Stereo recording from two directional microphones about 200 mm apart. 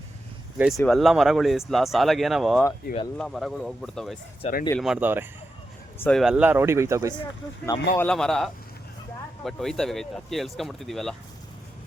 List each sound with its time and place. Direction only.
0.6 s speech: centre (ahead or behind)
4.4 s speech: 35° left (ahead or behind)
4.8 s speech: 5° right (ahead or behind)
6.0 s speech: 5° left (ahead or behind); by 7.1 s 15° right (ahead or behind)
7.6 s speech: 10° left (ahead or behind)